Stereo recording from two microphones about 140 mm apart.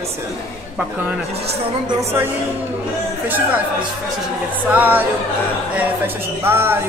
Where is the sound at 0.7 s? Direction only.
10° right (ahead or behind).